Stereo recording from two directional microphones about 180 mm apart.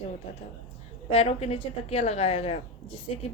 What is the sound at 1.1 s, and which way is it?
A woman's voice, 35° left (ahead or behind).